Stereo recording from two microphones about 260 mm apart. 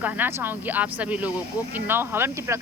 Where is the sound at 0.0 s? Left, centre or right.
Centre.